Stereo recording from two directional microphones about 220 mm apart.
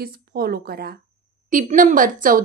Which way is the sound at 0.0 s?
45° right (ahead or behind).